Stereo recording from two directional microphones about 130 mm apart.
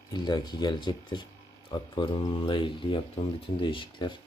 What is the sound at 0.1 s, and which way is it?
Speech, 35° left (ahead or behind).